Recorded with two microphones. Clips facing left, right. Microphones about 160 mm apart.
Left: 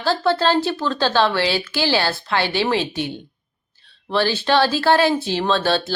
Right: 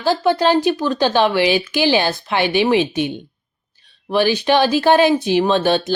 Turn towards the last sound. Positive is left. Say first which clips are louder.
# right 3 dB
turn(degrees=-15)  # may be behind; listen again after turning